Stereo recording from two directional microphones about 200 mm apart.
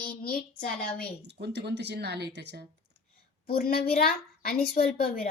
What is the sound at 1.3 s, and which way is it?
A woman's voice, 55° right (ahead or behind).